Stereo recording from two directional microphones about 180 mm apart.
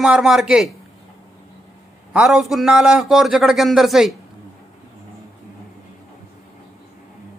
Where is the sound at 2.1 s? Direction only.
5° right (ahead or behind).